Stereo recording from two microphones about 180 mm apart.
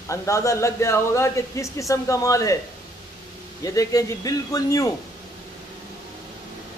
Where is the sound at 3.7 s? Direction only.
20° left (ahead or behind).